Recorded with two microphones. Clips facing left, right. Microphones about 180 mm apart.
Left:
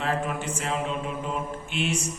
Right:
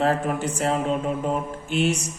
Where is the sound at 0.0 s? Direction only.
40° right (ahead or behind).